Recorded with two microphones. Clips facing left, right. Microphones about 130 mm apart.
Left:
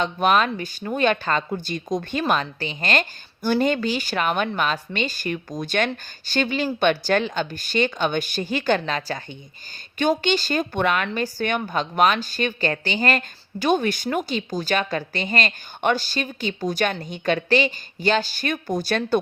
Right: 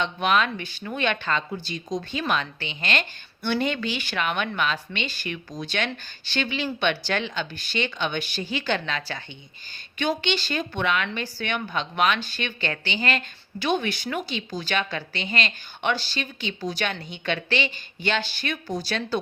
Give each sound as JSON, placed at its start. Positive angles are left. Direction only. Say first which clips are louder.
{"t": 0.0, "sound": "speech", "louder": "left 3 dB", "side_deg": 40}